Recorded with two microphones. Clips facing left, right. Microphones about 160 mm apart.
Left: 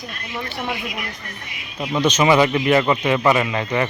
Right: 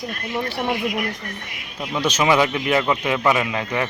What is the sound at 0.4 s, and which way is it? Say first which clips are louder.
Speech: right 3 dB; 35° right (ahead or behind).